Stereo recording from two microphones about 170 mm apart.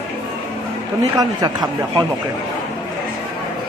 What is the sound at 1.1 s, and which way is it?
Speech, 25° right (ahead or behind).